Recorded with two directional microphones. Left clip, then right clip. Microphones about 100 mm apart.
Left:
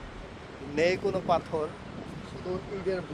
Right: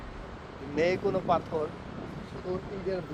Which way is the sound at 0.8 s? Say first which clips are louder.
Left 1 dB; 50° left (ahead or behind).